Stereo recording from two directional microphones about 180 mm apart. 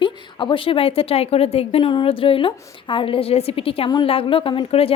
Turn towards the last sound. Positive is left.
turn(degrees=30)  # may be behind; listen again after turning